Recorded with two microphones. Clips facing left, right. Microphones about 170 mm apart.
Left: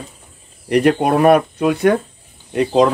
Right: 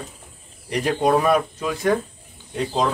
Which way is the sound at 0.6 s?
65° left (ahead or behind).